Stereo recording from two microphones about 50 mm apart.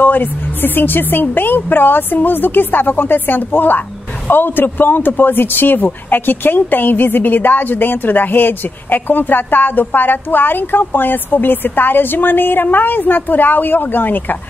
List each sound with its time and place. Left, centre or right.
0.0 s speech: left